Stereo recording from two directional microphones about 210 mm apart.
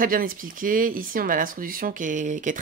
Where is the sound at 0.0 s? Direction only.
40° right (ahead or behind).